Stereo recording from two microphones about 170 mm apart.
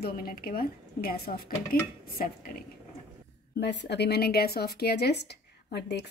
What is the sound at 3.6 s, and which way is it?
Speech, 85° left.